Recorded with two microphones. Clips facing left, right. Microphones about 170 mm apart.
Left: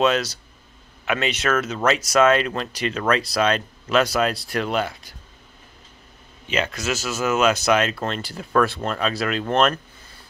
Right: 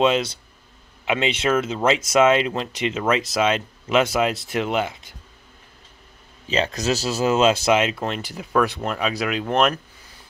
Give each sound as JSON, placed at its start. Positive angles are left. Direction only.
{"t": 0.0, "sound": "speech", "side_deg": -25}
{"t": 6.4, "sound": "speech", "side_deg": -35}